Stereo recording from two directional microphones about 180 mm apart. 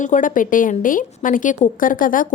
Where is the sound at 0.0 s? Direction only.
45° left (ahead or behind).